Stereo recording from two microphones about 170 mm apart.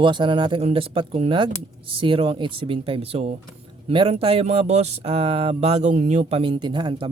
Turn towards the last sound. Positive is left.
turn(degrees=-30)  # may be behind; listen again after turning